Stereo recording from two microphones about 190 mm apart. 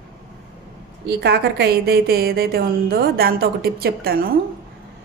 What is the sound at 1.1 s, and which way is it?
A woman's voice, 60° right (ahead or behind).